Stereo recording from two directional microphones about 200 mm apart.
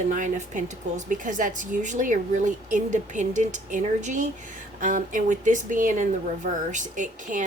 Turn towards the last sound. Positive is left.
turn(degrees=-40)  # may be behind; listen again after turning